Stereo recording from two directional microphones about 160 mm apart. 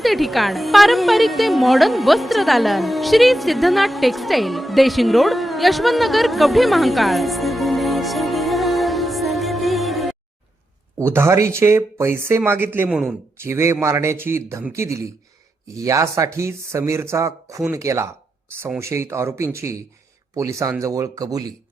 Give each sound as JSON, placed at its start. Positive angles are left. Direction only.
{"t": 0.0, "sound": "speech", "side_deg": 0}
{"t": 10.9, "sound": "a man's voice", "side_deg": -15}